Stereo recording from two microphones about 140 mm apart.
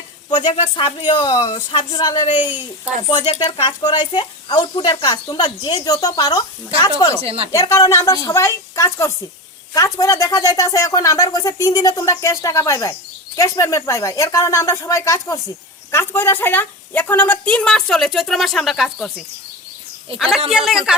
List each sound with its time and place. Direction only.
0.3 s speech: 30° left (ahead or behind)
2.4 s speech: 15° right (ahead or behind)
3.2 s speech: 50° left (ahead or behind)
3.4 s speech: 35° left (ahead or behind)
7.2 s speech: 45° right (ahead or behind)
7.5 s a woman's voice: 25° left (ahead or behind); by 19.1 s centre (ahead or behind)
20.1 s speech: centre (ahead or behind)